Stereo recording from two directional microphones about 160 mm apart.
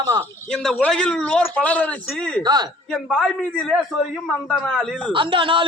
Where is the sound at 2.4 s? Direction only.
25° right (ahead or behind).